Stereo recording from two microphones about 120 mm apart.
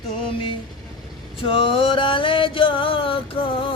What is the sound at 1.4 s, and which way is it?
Music, 50° left (ahead or behind).